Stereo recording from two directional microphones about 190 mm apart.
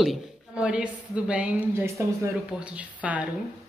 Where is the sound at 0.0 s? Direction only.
5° right (ahead or behind).